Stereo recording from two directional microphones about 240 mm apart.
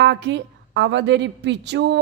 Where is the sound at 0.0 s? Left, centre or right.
Right.